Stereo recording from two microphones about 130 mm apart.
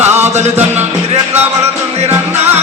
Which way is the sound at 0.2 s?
60° right (ahead or behind).